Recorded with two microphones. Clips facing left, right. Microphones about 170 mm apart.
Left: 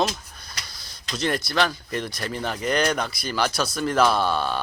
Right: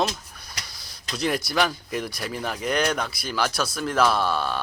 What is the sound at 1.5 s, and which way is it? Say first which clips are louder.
Speech: even; 10° right (ahead or behind).